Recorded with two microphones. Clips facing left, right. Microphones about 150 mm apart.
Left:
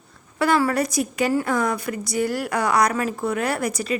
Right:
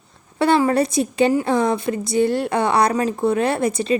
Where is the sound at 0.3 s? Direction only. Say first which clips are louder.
Right 4 dB; 25° right (ahead or behind).